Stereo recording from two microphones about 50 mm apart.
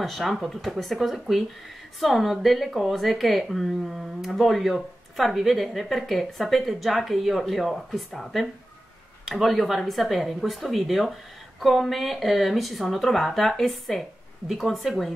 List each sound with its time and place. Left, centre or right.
0.0 s speech: centre